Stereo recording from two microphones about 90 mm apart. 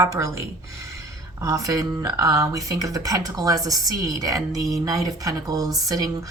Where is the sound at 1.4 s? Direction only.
40° right (ahead or behind).